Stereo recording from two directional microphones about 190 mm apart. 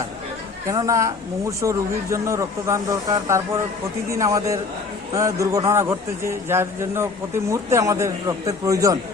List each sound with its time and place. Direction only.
0.7 s a man's voice: 15° right (ahead or behind)